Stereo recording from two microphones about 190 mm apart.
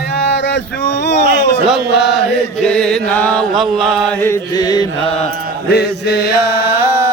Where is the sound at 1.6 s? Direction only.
Centre (ahead or behind).